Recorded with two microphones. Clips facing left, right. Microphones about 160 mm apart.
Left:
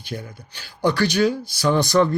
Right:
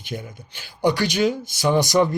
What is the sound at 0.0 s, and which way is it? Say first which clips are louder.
Speech: even; 20° right (ahead or behind).